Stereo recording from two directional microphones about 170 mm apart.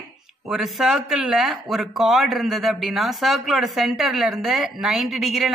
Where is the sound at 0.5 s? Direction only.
Centre (ahead or behind).